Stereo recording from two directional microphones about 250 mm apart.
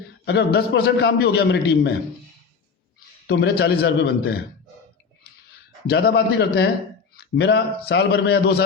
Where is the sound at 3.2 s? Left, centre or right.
Left.